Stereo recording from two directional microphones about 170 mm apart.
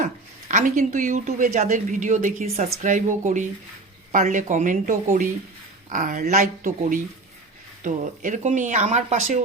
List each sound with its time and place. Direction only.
0.0 s speech: 50° right (ahead or behind)